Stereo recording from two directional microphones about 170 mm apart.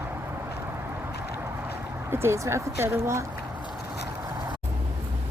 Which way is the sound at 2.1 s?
15° right (ahead or behind).